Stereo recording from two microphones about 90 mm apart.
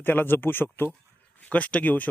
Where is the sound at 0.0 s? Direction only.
20° left (ahead or behind).